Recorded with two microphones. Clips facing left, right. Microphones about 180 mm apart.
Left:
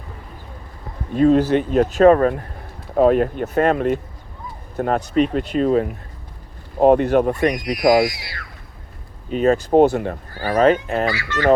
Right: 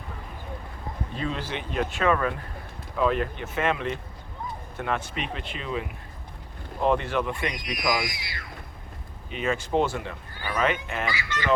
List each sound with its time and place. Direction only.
1.1 s speech: 45° left (ahead or behind)
8.1 s speech: 20° right (ahead or behind)
9.3 s speech: 40° left (ahead or behind)
9.8 s speech: 55° left (ahead or behind); by 11.0 s 40° left (ahead or behind)
11.2 s fowl: 15° right (ahead or behind)